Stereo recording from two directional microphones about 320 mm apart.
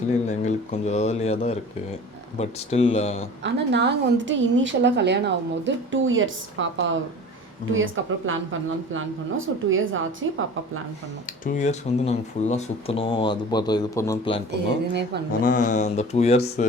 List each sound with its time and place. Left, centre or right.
0.3 s speech: left
3.4 s a woman's voice: right
9.6 s a woman's voice: right
11.4 s speech: left
14.5 s a woman's voice: right
15.3 s speech: left